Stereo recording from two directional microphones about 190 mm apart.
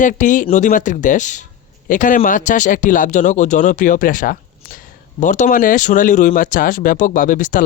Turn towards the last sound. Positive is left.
turn(degrees=45)  # may be behind; listen again after turning